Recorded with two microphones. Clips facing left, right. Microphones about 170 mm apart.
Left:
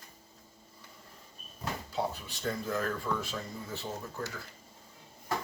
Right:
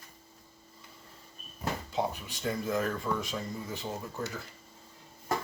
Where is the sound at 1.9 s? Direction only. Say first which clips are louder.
Even; 15° right (ahead or behind).